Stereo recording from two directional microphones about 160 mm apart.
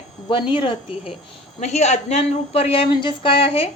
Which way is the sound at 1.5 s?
45° left (ahead or behind).